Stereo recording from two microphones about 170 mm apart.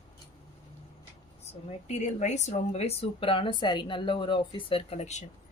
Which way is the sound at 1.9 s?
40° left (ahead or behind).